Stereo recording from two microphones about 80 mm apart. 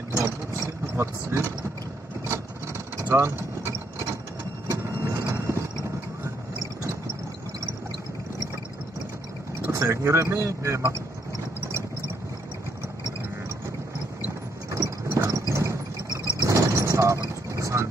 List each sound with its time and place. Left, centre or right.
0.2 s vehicle: right
9.6 s speech: right
14.7 s a sound: right
16.1 s vehicle: right